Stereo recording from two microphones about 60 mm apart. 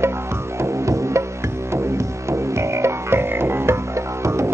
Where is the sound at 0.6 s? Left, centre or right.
Right.